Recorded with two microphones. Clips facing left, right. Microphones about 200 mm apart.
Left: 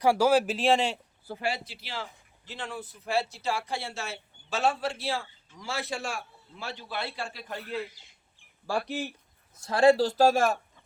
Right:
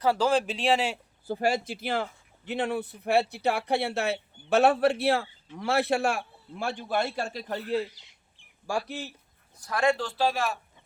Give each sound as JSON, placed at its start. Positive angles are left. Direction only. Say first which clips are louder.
{"t": 0.0, "sound": "speech", "louder": "left 2 dB", "side_deg": 10}
{"t": 1.4, "sound": "a man's voice", "louder": "right 6 dB", "side_deg": -45}
{"t": 8.7, "sound": "speech", "louder": "even", "side_deg": -10}
{"t": 9.6, "sound": "a man's voice", "louder": "left 5 dB", "side_deg": 30}